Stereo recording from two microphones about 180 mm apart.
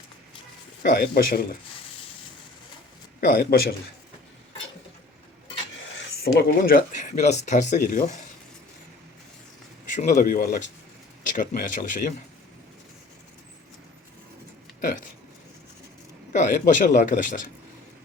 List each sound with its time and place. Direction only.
0.8 s a man's voice: 55° left (ahead or behind)
3.2 s a man's voice: 50° left (ahead or behind)
6.2 s speech: 50° left (ahead or behind)
9.9 s speech: 45° left (ahead or behind)
14.8 s speech: 50° left (ahead or behind)
16.3 s speech: 45° left (ahead or behind)